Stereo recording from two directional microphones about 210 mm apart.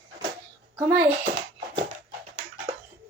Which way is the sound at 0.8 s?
10° right (ahead or behind).